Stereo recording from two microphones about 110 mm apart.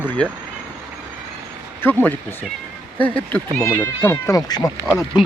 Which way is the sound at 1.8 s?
20° left (ahead or behind).